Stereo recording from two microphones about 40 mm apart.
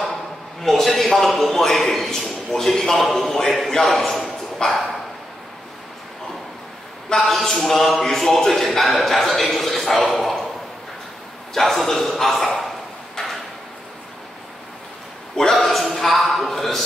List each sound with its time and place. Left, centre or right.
0.1 s a man's voice: centre
7.2 s a man's voice: centre
11.5 s a man's voice: centre
15.5 s a man's voice: centre